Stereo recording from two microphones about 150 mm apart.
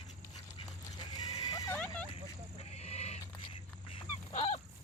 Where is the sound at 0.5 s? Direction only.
30° left (ahead or behind).